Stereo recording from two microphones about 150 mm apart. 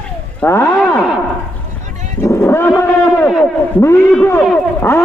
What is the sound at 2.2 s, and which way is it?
A man's voice, 20° left (ahead or behind).